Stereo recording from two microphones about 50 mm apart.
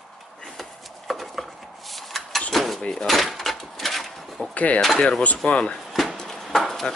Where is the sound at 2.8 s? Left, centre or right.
Centre.